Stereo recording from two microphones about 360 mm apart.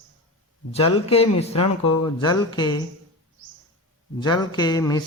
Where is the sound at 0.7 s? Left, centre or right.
Centre.